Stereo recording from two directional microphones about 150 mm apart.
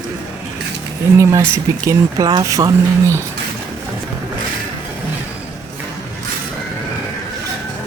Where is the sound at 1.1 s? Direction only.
20° right (ahead or behind).